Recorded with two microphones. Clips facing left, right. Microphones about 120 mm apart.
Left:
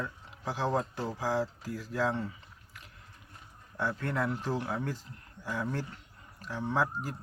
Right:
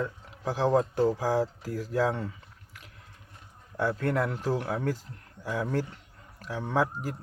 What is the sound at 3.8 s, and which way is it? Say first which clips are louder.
A man's voice: right 5 dB; 45° right (ahead or behind).